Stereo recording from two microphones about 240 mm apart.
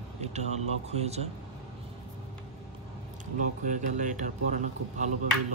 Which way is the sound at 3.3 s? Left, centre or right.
Right.